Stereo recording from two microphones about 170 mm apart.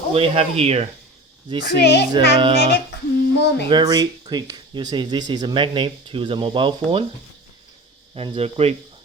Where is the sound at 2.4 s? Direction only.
30° right (ahead or behind).